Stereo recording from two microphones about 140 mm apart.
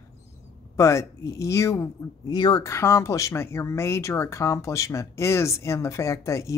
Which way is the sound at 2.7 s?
20° left (ahead or behind).